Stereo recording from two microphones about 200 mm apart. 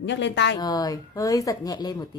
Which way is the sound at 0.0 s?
60° left (ahead or behind).